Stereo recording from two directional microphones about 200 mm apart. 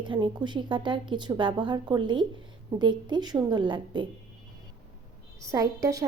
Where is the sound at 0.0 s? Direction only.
25° right (ahead or behind).